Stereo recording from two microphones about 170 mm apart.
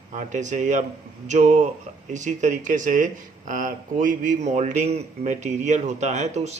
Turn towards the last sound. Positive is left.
turn(degrees=-40)  # may be behind; listen again after turning